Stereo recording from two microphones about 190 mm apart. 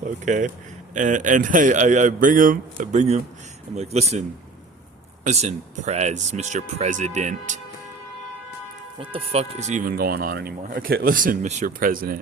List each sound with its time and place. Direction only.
0.0 s speech: 40° right (ahead or behind)
5.2 s speech: 40° right (ahead or behind)
9.0 s speech: 30° right (ahead or behind); by 12.2 s 50° right (ahead or behind)